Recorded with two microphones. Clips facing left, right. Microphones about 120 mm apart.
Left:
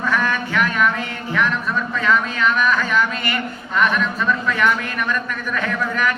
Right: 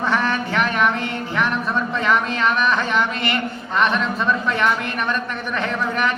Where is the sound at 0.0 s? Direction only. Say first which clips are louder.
Even; 25° right (ahead or behind).